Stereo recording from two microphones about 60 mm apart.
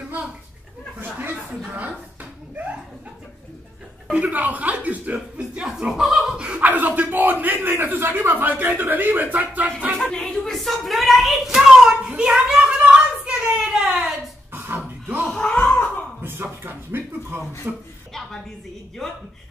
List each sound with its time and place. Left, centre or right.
1.0 s chuckle: right
1.7 s speech: right
4.1 s speech: right
5.7 s speech: centre
6.3 s speech: centre
6.6 s a man's voice: right
9.9 s a sound: centre
15.5 s a sound: left
16.2 s a sound: right
17.7 s a man's voice: right